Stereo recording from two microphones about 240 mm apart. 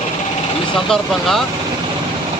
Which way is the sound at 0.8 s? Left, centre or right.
Centre.